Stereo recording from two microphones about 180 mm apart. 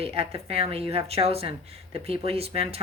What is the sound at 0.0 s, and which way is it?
Speech, 35° right (ahead or behind).